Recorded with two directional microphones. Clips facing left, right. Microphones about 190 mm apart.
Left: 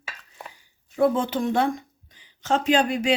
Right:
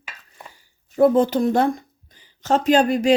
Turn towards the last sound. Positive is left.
turn(degrees=-45)  # may be behind; listen again after turning